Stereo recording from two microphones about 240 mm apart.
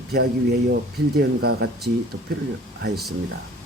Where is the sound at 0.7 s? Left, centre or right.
Right.